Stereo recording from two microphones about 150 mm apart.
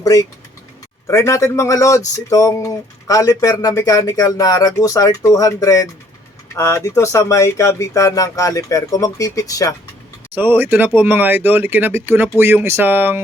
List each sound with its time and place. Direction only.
0.0 s speech: 25° left (ahead or behind)
10.3 s speech: 15° right (ahead or behind)